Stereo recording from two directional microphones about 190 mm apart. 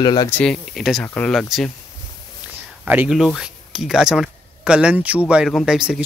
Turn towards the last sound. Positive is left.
turn(degrees=-5)  # may be behind; listen again after turning